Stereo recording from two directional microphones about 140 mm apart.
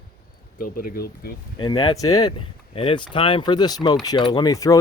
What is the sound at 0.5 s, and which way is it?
Speech, 90° left.